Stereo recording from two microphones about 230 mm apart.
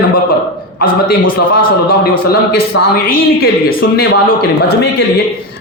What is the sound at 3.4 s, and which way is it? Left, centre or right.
Speech, left.